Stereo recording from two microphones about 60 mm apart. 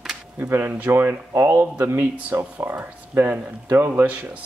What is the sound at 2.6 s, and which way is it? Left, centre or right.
Speech, right.